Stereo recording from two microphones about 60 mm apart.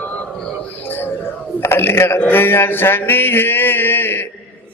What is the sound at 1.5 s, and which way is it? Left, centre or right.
Speech, left.